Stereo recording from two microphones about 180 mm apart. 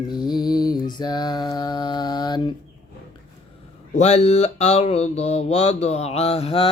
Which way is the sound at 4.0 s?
40° left (ahead or behind).